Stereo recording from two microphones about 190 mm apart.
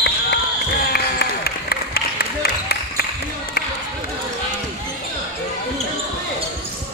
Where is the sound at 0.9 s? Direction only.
55° left (ahead or behind).